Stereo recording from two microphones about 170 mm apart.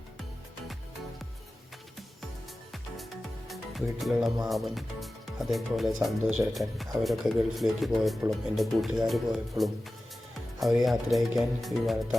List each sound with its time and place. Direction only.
3.5 s music: centre (ahead or behind)
4.4 s speech: centre (ahead or behind)